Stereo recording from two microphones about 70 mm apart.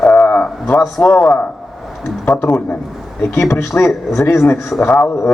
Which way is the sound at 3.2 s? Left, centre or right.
Left.